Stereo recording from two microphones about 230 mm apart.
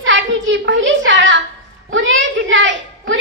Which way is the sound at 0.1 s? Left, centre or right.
Right.